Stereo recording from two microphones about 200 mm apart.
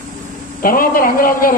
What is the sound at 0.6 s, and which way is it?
Speech, 45° left (ahead or behind).